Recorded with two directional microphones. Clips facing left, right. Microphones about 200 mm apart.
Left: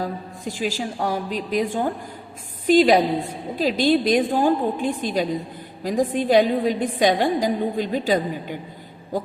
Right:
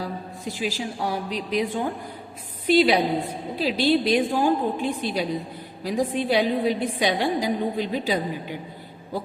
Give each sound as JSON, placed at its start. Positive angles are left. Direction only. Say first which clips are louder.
{"t": 0.0, "sound": "a woman's voice", "louder": "left 3 dB", "side_deg": 45}